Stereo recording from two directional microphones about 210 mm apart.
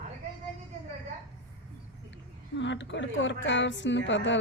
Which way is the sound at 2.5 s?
60° left (ahead or behind).